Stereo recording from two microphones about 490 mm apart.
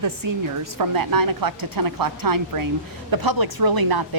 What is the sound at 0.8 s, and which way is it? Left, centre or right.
Speech, right.